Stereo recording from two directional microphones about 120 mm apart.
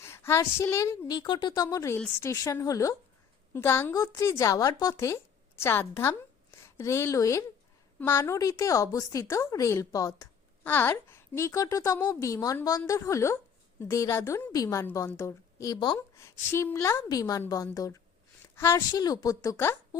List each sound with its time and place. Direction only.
0.0 s a woman's voice: 20° left (ahead or behind)
10.6 s a woman's voice: 15° left (ahead or behind); by 16.0 s 35° left (ahead or behind)
16.0 s a woman's voice: 25° left (ahead or behind)
18.9 s a woman's voice: 35° left (ahead or behind)